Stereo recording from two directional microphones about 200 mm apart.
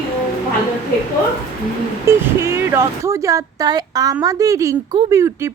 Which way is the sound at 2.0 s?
15° right (ahead or behind).